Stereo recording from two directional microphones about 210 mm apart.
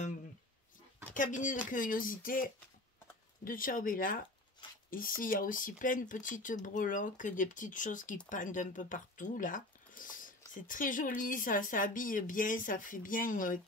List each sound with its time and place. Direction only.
1.1 s speech: 40° left (ahead or behind)